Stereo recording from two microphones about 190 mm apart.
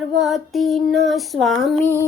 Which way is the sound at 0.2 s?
Centre (ahead or behind).